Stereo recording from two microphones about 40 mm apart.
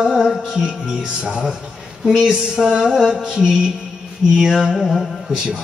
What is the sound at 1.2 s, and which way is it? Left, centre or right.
A man's voice, right.